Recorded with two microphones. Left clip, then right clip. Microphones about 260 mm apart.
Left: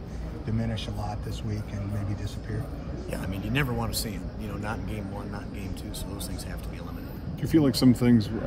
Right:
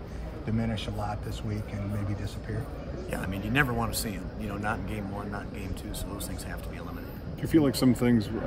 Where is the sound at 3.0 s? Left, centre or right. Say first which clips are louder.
Right 1 dB; centre.